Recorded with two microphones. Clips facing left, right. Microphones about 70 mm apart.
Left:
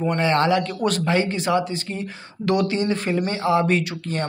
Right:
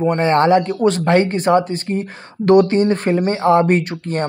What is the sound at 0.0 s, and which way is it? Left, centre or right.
A man's voice, right.